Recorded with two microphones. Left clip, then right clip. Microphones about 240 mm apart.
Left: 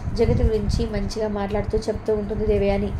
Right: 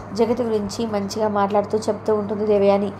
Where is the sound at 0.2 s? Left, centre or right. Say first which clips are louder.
Right 2 dB; centre.